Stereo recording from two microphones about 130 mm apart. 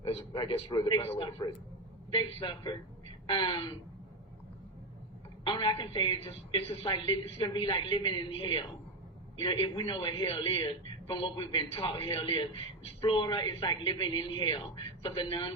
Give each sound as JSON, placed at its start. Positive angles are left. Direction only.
{"t": 0.0, "sound": "a man's voice", "side_deg": 40}
{"t": 1.0, "sound": "speech", "side_deg": 50}
{"t": 2.0, "sound": "a man's voice", "side_deg": 40}
{"t": 5.5, "sound": "a man's voice", "side_deg": 35}
{"t": 6.2, "sound": "a man's voice", "side_deg": 50}